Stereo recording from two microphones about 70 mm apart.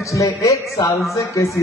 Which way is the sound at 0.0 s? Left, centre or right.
Left.